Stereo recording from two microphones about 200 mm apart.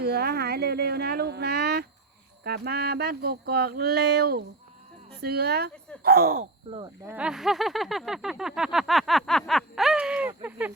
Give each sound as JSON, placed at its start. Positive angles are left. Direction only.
{"t": 0.0, "sound": "a sound", "side_deg": -50}
{"t": 6.7, "sound": "speech", "side_deg": -25}
{"t": 7.0, "sound": "speech", "side_deg": -5}